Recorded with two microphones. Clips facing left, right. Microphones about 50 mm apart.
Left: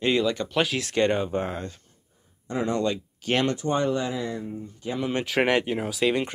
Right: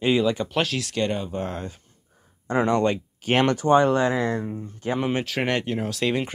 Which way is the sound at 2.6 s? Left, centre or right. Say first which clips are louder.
Right 4 dB; right.